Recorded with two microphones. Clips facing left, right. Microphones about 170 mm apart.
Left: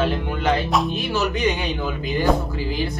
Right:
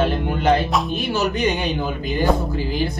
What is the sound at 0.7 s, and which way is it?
Speech, centre (ahead or behind).